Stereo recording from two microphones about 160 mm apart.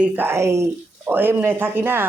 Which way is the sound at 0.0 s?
15° right (ahead or behind).